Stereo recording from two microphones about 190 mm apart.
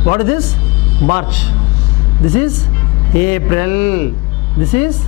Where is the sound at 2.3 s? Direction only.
10° left (ahead or behind).